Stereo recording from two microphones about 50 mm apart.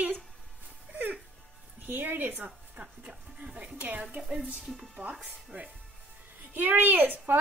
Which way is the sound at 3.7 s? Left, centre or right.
Right.